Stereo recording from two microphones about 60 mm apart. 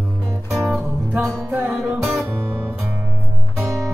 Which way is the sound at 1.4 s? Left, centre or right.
Right.